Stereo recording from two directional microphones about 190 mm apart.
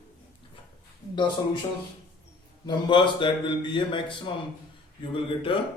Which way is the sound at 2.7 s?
25° left (ahead or behind).